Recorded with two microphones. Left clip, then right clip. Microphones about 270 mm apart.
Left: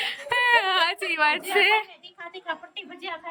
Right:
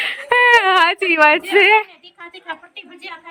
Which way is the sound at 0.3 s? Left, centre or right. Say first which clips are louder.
Right 9 dB; centre.